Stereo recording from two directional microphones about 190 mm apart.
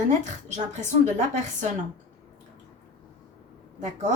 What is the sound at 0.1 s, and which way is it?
A woman's voice, 40° right (ahead or behind).